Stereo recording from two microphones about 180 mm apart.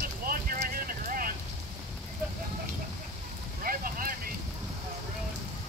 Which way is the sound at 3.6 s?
50° right (ahead or behind).